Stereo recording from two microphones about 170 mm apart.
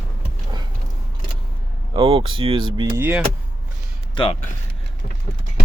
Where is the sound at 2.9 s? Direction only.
10° right (ahead or behind).